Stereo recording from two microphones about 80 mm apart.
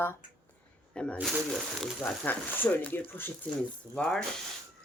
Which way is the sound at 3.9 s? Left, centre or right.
Centre.